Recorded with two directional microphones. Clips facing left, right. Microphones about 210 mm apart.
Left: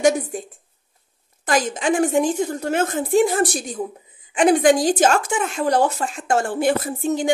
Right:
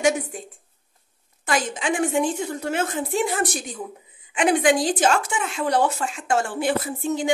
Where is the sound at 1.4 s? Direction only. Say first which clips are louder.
Left 4 dB; 40° left (ahead or behind).